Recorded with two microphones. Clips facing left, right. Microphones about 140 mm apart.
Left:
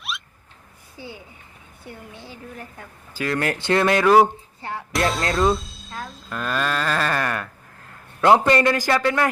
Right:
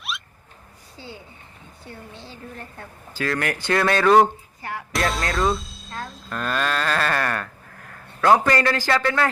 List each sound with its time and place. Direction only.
0.1 s a sound: centre (ahead or behind)
0.9 s speech: 15° left (ahead or behind)
3.3 s speech: 25° left (ahead or behind)
4.0 s speech: 5° left (ahead or behind)
7.9 s a man's voice: 20° left (ahead or behind)